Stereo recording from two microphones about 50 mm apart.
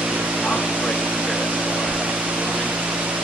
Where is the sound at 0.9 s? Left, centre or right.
Right.